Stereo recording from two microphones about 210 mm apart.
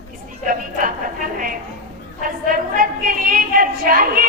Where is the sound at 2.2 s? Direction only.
40° right (ahead or behind).